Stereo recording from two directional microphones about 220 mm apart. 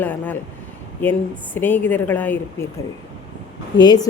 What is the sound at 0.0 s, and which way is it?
Speech, 10° left (ahead or behind).